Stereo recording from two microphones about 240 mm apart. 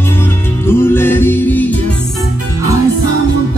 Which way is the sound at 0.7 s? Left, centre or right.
Centre.